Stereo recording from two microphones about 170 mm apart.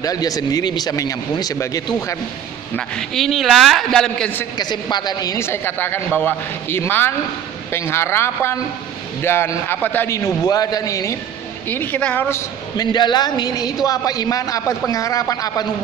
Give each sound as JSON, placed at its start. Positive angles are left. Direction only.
{"t": 0.0, "sound": "speech", "side_deg": 20}
{"t": 2.7, "sound": "a man's voice", "side_deg": 5}
{"t": 4.6, "sound": "a man's voice", "side_deg": 25}